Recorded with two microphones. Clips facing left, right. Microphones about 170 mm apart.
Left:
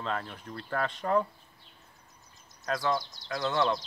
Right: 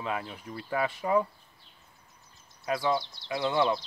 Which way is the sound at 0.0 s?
10° right (ahead or behind).